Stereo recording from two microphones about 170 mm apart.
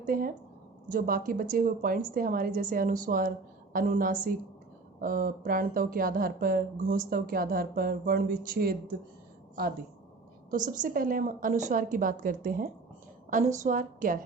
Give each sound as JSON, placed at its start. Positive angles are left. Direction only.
{"t": 0.0, "sound": "speech", "side_deg": -55}
{"t": 10.7, "sound": "a woman's voice", "side_deg": -55}